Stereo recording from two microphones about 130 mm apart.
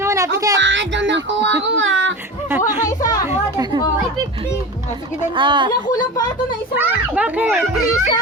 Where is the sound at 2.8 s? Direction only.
25° left (ahead or behind).